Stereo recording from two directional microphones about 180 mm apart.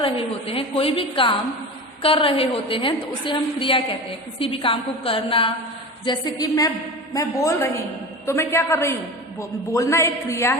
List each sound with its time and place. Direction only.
0.0 s a woman's voice: 30° left (ahead or behind); by 10.6 s 15° left (ahead or behind)